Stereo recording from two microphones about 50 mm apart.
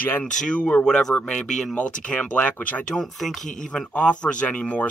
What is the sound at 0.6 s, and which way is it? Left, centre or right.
Speech, left.